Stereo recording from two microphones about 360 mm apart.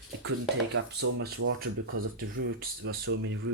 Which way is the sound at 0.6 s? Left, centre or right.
Right.